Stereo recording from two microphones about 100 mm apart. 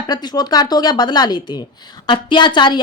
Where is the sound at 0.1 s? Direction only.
45° left (ahead or behind).